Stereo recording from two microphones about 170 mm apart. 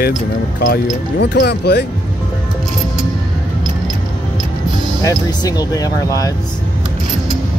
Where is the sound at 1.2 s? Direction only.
65° left (ahead or behind).